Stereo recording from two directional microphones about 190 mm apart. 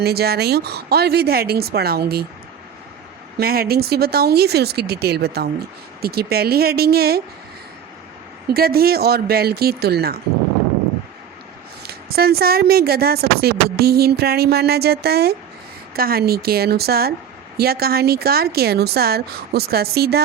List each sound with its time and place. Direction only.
0.0 s speech: 55° right (ahead or behind)
3.3 s speech: 50° right (ahead or behind)
8.4 s speech: 55° right (ahead or behind)
11.9 s speech: 55° right (ahead or behind)